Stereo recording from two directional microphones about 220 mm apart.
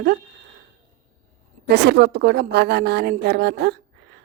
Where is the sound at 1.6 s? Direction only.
50° right (ahead or behind).